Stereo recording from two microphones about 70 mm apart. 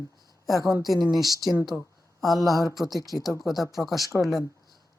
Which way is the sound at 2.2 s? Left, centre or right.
Centre.